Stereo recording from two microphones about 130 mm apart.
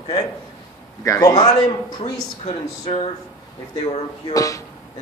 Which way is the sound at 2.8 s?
45° left (ahead or behind).